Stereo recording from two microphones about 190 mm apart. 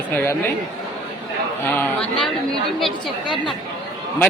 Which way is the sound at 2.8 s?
Centre (ahead or behind).